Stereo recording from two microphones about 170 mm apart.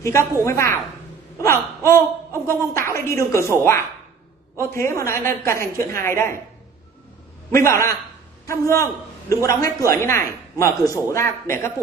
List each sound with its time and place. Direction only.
0.0 s a woman's voice: 15° left (ahead or behind)
7.5 s a woman's voice: 15° left (ahead or behind)